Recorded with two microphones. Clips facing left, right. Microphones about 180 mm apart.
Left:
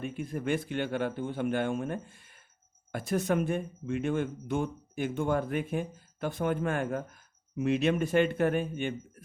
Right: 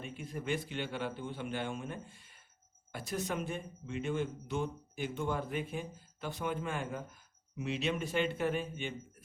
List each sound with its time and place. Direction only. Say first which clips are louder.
0.0 s speech: left 7 dB; 50° left (ahead or behind)